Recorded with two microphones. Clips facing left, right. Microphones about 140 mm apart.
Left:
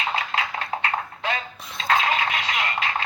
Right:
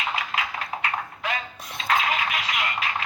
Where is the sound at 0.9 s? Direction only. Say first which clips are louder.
Left 1 dB; 30° left (ahead or behind).